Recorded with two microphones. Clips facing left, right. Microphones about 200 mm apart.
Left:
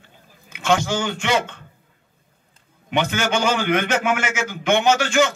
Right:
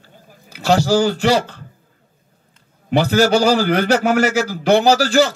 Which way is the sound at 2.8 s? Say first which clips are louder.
Right 8 dB; 35° right (ahead or behind).